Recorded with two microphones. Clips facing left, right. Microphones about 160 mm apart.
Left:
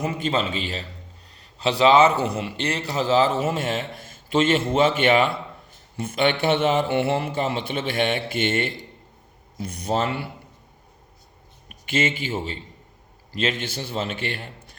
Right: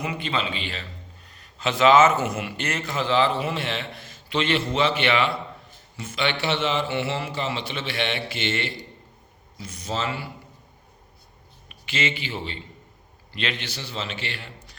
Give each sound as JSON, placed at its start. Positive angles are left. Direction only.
{"t": 0.0, "sound": "a man's voice", "side_deg": 45}
{"t": 11.7, "sound": "a man's voice", "side_deg": 50}